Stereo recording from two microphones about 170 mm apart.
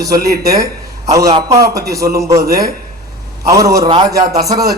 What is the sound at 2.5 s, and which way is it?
Speech, 60° right (ahead or behind).